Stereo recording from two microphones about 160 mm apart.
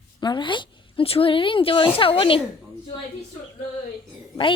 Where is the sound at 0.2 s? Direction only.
30° left (ahead or behind).